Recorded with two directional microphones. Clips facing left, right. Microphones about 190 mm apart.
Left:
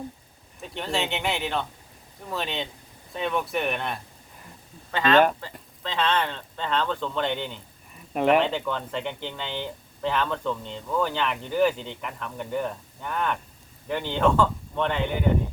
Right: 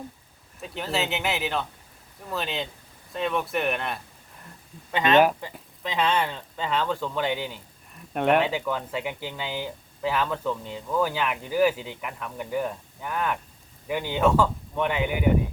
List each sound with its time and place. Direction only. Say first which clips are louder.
0.6 s speech: even; centre (ahead or behind)
4.9 s speech: even; 15° right (ahead or behind)